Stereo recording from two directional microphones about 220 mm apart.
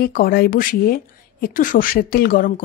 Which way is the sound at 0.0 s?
40° left (ahead or behind).